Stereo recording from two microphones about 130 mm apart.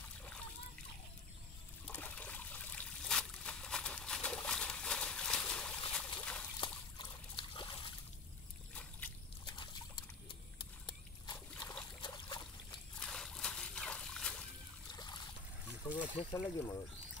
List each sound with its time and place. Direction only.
0.2 s splash: 5° left (ahead or behind)
1.9 s trickle: 10° left (ahead or behind)
6.6 s trickle: 40° left (ahead or behind)
9.5 s a sound: 40° left (ahead or behind)
13.0 s dog: 5° left (ahead or behind)
14.9 s boat: 30° left (ahead or behind)
15.8 s a sound: 30° left (ahead or behind)
16.3 s speech: 20° left (ahead or behind)